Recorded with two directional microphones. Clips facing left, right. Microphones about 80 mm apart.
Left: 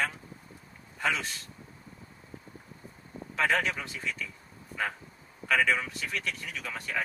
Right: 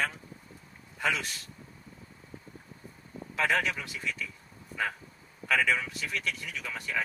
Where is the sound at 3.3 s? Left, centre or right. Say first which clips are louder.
Left 1 dB; centre.